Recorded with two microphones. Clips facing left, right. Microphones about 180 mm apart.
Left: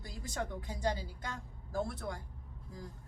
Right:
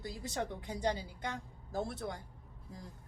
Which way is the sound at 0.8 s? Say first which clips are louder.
Right 1 dB; 20° right (ahead or behind).